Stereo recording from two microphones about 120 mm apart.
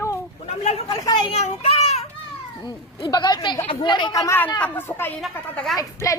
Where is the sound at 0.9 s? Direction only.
35° left (ahead or behind).